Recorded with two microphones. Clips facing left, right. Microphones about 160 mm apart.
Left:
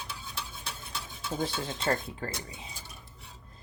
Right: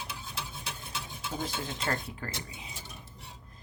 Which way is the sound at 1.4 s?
30° left (ahead or behind).